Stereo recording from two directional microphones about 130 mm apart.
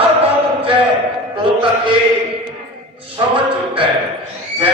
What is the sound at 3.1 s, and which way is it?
Speech, 40° right (ahead or behind).